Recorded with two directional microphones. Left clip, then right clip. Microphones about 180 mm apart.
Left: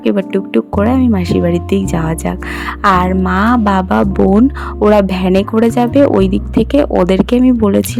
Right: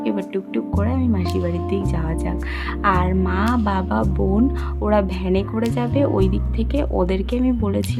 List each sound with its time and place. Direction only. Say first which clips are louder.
0.0 s speech: left 9 dB; 40° left (ahead or behind)